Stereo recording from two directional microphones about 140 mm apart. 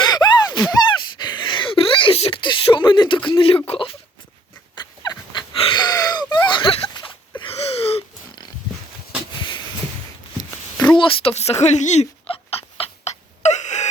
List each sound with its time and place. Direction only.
0.0 s gasp: 30° left (ahead or behind)
3.2 s speech: 40° left (ahead or behind)
4.7 s a sound: 30° left (ahead or behind)
10.9 s dog: 40° left (ahead or behind); by 13.8 s 55° left (ahead or behind)